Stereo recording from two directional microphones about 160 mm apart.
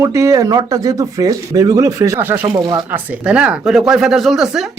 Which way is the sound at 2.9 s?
5° right (ahead or behind).